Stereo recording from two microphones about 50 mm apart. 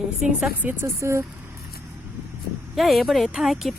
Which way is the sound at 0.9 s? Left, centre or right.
Right.